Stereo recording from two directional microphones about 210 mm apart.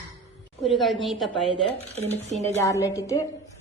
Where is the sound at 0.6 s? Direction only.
Centre (ahead or behind).